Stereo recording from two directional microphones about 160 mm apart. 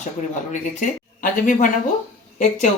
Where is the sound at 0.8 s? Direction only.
55° left (ahead or behind).